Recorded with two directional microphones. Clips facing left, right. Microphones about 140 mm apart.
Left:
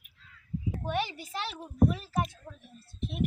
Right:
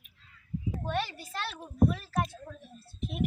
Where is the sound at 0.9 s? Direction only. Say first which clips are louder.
Left 1 dB; 15° left (ahead or behind).